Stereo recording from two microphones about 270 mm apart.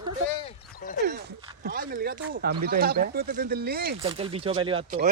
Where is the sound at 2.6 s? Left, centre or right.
Right.